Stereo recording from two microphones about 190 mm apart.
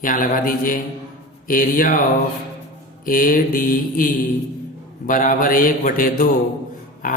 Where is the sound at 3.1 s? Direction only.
45° left (ahead or behind).